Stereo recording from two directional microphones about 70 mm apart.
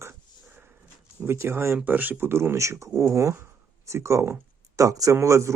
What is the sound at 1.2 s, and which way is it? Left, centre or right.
Speech, right.